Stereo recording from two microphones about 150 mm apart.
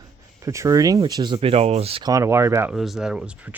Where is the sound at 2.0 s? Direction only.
20° right (ahead or behind).